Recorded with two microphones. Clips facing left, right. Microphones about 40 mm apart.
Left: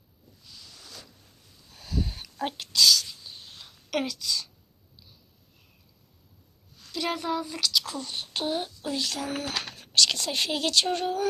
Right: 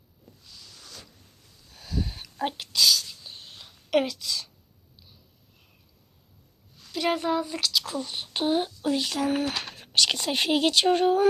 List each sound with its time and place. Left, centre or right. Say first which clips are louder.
0.4 s a sound: even; centre
3.9 s a woman's voice: right 4 dB; centre
6.9 s speech: right 4 dB; centre